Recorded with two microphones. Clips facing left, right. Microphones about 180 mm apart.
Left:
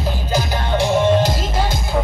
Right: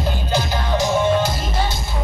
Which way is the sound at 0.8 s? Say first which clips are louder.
Left 3 dB; 35° left (ahead or behind).